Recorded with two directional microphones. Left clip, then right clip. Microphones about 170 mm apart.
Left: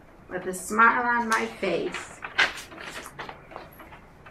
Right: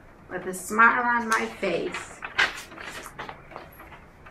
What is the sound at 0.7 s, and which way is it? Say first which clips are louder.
Speech: right 1 dB; 10° left (ahead or behind).